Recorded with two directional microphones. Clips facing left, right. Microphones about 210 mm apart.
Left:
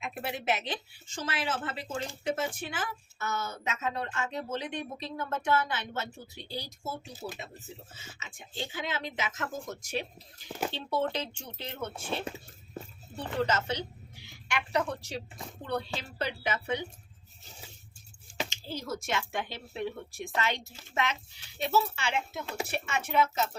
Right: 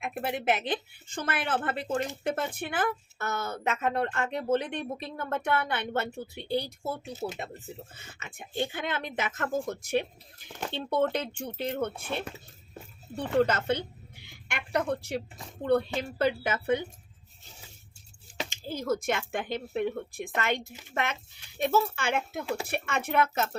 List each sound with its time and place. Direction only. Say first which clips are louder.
0.0 s speech: right 4 dB; 55° right (ahead or behind)
7.1 s speech: right 6 dB; 25° right (ahead or behind)
7.9 s speech: right 3 dB; 55° right (ahead or behind)
13.5 s a woman's voice: right 3 dB; 55° right (ahead or behind)
18.4 s speech: right 12 dB; 50° right (ahead or behind)